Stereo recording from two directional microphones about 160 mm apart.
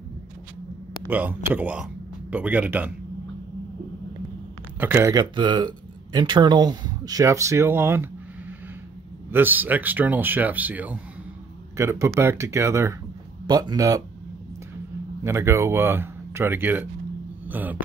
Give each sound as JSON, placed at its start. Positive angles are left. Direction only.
{"t": 1.0, "sound": "speech", "side_deg": -10}
{"t": 4.7, "sound": "speech", "side_deg": -15}
{"t": 5.2, "sound": "speech", "side_deg": -30}
{"t": 15.2, "sound": "speech", "side_deg": -15}